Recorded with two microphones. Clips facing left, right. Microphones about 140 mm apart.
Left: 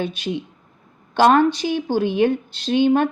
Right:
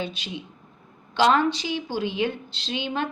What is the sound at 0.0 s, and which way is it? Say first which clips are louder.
Speech: left 7 dB; 50° left (ahead or behind).